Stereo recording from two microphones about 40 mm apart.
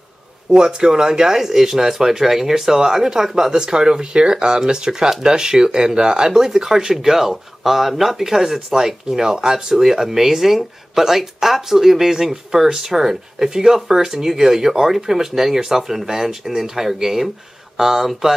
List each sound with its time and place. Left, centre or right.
0.5 s speech: right